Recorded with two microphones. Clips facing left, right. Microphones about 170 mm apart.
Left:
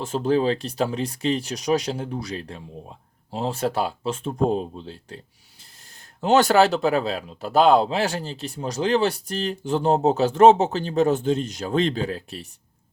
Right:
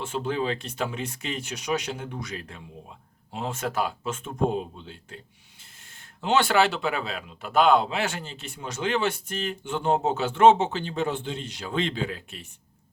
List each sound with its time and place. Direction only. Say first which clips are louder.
0.0 s speech: left 7 dB; 40° left (ahead or behind)
6.2 s speech: left 5 dB; 40° left (ahead or behind)